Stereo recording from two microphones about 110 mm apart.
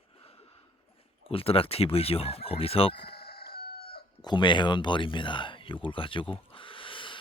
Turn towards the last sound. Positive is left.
turn(degrees=50)  # may be behind; listen again after turning